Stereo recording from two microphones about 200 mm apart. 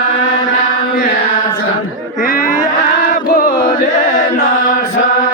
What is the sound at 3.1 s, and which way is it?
Chant, 45° left (ahead or behind).